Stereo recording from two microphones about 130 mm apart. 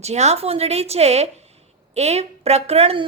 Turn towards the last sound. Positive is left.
turn(degrees=-50)  # may be behind; listen again after turning